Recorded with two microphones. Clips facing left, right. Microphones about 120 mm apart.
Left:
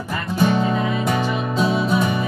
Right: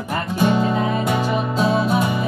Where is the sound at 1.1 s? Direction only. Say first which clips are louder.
Right 1 dB; 5° right (ahead or behind).